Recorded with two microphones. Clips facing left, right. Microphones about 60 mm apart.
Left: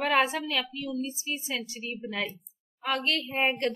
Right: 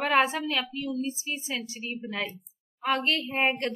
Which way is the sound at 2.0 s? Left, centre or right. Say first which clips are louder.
Left 1 dB; centre.